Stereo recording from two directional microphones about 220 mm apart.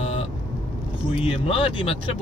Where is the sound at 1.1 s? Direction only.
25° left (ahead or behind).